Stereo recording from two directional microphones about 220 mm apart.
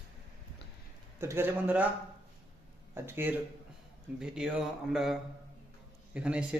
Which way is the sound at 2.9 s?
10° right (ahead or behind).